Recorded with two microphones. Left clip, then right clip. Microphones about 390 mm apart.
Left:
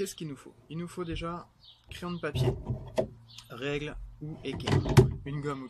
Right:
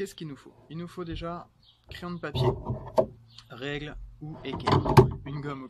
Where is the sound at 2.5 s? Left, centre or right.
Right.